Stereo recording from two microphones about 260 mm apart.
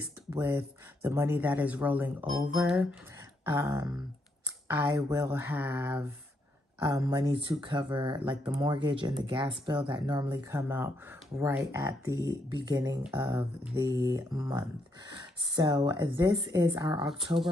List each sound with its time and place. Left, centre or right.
0.0 s speech: centre